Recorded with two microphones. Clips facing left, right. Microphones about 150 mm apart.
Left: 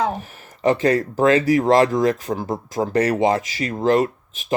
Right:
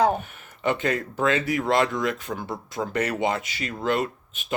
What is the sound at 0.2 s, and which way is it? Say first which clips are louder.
Speech: left 7 dB; 35° left (ahead or behind).